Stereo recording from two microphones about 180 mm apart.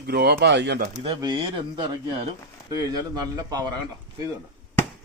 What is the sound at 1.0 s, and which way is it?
Speech, 25° right (ahead or behind).